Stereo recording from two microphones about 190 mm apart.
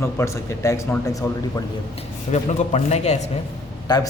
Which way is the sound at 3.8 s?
20° left (ahead or behind).